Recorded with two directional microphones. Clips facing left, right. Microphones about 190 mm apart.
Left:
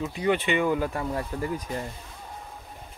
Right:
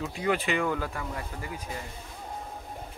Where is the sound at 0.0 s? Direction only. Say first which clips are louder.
Left 3 dB; centre (ahead or behind).